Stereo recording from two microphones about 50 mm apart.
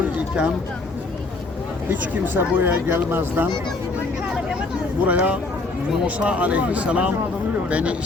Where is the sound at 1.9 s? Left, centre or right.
Right.